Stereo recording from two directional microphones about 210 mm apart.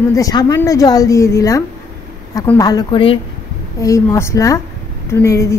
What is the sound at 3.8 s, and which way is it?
Speech, 15° left (ahead or behind).